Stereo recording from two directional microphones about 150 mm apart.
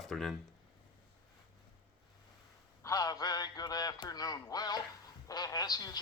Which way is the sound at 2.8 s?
20° left (ahead or behind).